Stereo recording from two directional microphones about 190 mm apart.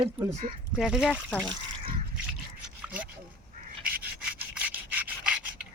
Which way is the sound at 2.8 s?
10° right (ahead or behind).